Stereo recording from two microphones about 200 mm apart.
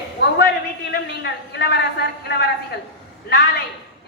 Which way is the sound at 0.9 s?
55° left (ahead or behind).